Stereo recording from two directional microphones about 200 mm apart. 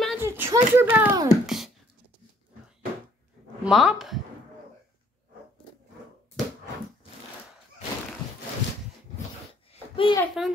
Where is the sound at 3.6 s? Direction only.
Centre (ahead or behind).